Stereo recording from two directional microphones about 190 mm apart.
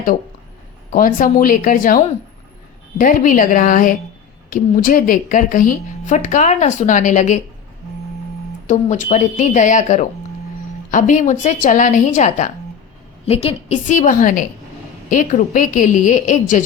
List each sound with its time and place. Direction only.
0.9 s a woman's voice: 45° left (ahead or behind)
3.0 s a woman's voice: 45° left (ahead or behind)
8.6 s a woman's voice: 40° left (ahead or behind)